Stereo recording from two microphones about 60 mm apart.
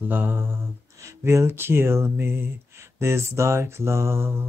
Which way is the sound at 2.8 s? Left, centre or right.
Right.